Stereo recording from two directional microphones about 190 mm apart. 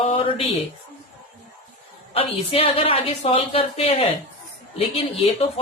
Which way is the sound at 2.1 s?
30° left (ahead or behind).